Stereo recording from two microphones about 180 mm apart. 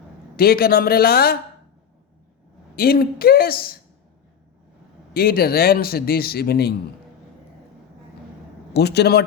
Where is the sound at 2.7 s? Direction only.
55° left (ahead or behind).